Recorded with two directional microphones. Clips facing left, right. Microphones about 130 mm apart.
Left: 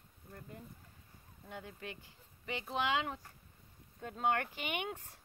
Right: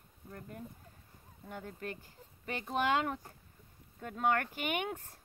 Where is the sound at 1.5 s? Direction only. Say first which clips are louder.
Right 4 dB; 45° right (ahead or behind).